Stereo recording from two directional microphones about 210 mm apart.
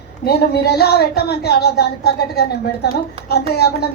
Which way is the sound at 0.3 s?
50° left (ahead or behind).